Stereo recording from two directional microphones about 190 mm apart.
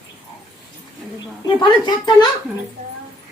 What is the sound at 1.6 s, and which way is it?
Speech, 25° left (ahead or behind).